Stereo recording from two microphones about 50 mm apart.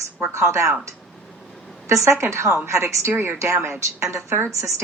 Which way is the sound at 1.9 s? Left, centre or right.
Right.